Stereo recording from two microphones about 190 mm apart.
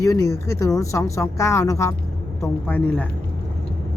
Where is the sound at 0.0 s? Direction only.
15° left (ahead or behind).